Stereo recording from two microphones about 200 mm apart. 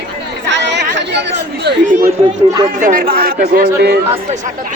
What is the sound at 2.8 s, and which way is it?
Speech, 40° right (ahead or behind).